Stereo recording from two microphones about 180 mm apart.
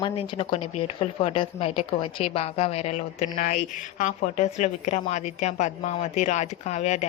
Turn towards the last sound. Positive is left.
turn(degrees=40)  # may be behind; listen again after turning